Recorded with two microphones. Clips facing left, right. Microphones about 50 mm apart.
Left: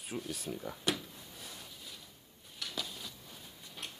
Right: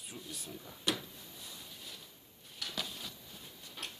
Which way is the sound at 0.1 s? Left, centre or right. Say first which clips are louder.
Left 8 dB; left.